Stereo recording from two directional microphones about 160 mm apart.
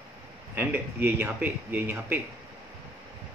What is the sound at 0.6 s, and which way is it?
Speech, 15° right (ahead or behind).